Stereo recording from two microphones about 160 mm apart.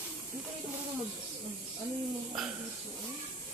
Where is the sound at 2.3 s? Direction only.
5° right (ahead or behind).